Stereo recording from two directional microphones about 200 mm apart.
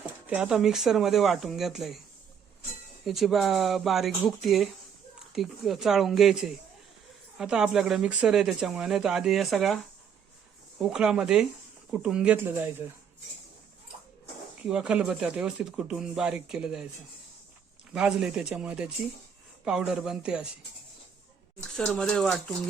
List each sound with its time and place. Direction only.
0.3 s a woman's voice: 5° right (ahead or behind)
3.0 s a woman's voice: centre (ahead or behind)
14.6 s a woman's voice: 5° right (ahead or behind)
17.9 s a woman's voice: 5° right (ahead or behind)
21.8 s a woman's voice: 5° left (ahead or behind)